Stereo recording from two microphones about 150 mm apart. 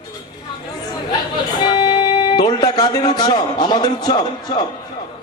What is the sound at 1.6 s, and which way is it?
Speech, 30° left (ahead or behind).